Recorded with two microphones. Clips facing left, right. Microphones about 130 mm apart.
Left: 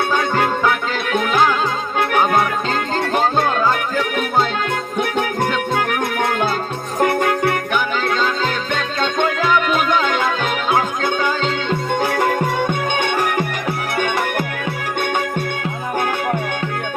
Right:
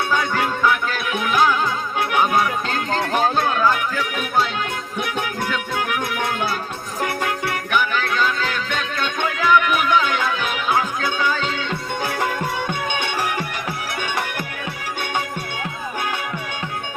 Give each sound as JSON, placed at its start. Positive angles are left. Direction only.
{"t": 0.2, "sound": "music", "side_deg": 50}
{"t": 4.9, "sound": "music", "side_deg": 50}
{"t": 7.7, "sound": "music", "side_deg": 20}
{"t": 9.1, "sound": "music", "side_deg": 50}